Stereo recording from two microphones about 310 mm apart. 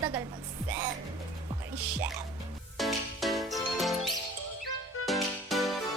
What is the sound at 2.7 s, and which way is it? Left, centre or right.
Music, centre.